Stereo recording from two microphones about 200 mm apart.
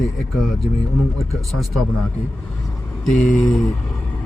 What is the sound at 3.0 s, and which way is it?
Speech, centre (ahead or behind).